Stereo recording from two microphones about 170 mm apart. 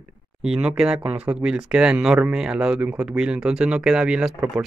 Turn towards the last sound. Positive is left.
turn(degrees=-5)  # may be behind; listen again after turning